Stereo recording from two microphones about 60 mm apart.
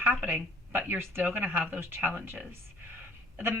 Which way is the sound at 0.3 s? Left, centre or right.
Right.